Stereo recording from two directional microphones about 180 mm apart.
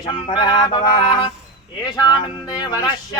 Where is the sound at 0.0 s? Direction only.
25° left (ahead or behind).